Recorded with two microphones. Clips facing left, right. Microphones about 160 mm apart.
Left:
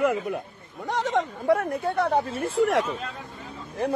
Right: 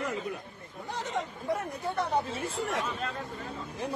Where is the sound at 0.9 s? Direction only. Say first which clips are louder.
Left 9 dB; 80° left; by 2.5 s 55° left (ahead or behind).